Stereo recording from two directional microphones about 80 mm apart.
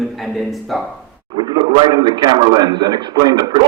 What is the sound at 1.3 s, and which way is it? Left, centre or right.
A man's voice, right.